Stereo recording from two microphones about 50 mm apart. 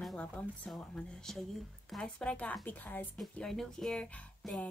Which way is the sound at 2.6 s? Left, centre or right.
Left.